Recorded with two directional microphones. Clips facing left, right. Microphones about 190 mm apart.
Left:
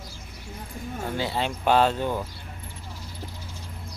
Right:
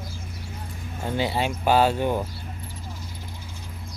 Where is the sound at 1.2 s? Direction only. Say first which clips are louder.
Right 4 dB; 15° right (ahead or behind).